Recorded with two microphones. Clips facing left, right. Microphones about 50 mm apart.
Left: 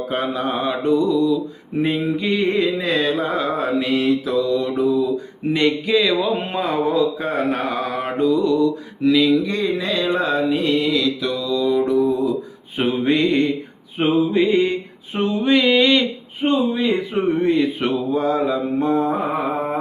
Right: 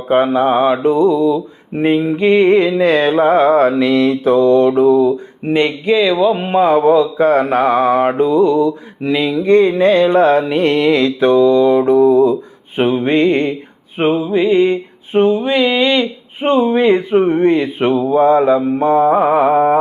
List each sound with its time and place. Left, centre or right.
0.1 s mantra: right
4.1 s mantra: right
5.1 s speech: right
6.2 s mantra: centre
6.5 s mantra: right
12.7 s mantra: right
14.3 s mantra: centre
14.7 s a sound: right
15.4 s mantra: centre
16.6 s mantra: right
17.7 s mantra: right